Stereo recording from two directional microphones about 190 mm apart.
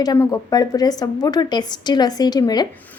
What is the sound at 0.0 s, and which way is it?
A woman's voice, 20° left (ahead or behind).